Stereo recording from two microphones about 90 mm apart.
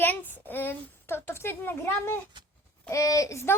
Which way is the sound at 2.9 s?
40° left (ahead or behind).